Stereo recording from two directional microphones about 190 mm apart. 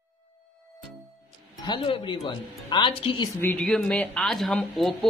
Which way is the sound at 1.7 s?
25° left (ahead or behind).